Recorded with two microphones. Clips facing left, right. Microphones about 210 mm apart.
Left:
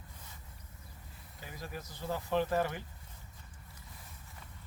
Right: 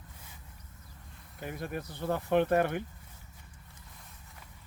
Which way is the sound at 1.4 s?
60° right (ahead or behind).